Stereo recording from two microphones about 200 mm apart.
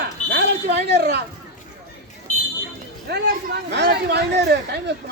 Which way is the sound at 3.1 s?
55° right (ahead or behind).